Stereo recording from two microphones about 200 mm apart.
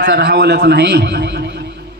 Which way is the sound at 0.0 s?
55° right (ahead or behind).